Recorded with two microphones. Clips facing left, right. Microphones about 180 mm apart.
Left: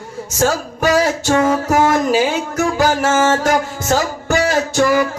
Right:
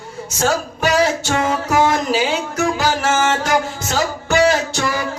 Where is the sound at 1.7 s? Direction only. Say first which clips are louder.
Left 1 dB; 45° left (ahead or behind).